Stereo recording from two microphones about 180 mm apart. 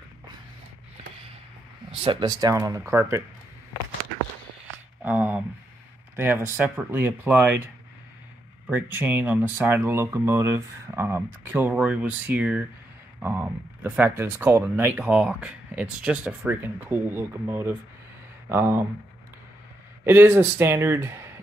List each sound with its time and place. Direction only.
1.9 s speech: 25° right (ahead or behind)
5.0 s speech: 10° right (ahead or behind)
20.1 s speech: 10° right (ahead or behind)